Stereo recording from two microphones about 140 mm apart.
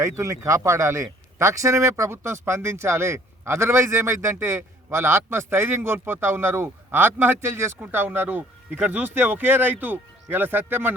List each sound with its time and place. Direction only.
0.0 s speech: 20° right (ahead or behind)